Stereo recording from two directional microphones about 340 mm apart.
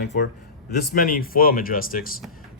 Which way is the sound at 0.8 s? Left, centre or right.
Left.